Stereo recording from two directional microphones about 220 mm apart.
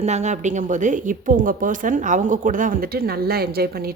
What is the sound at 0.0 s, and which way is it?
A woman's voice, 30° right (ahead or behind).